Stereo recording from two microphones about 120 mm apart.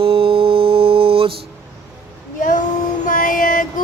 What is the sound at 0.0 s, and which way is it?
Mantra, 50° right (ahead or behind).